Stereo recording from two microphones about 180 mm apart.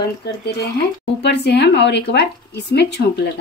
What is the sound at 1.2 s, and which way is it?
Speech, 70° left (ahead or behind).